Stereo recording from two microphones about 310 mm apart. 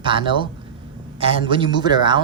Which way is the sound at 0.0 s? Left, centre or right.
Centre.